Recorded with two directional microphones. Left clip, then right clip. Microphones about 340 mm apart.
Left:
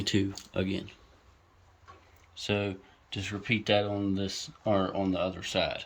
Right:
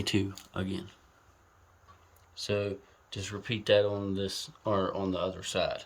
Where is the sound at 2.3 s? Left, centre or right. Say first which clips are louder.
Left 1 dB; centre.